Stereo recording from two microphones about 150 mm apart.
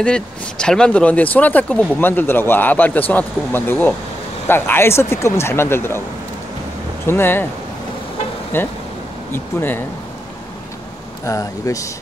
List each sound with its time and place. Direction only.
0.0 s speech: 5° left (ahead or behind)
7.1 s speech: 15° left (ahead or behind)
8.5 s speech: 15° left (ahead or behind)
11.2 s speech: 20° left (ahead or behind)